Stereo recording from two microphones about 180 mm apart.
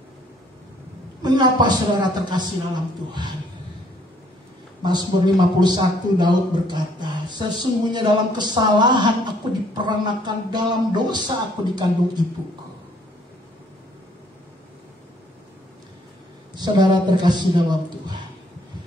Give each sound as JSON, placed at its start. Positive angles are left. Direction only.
{"t": 1.2, "sound": "speech", "side_deg": -25}
{"t": 4.8, "sound": "speech", "side_deg": -25}
{"t": 16.5, "sound": "speech", "side_deg": -25}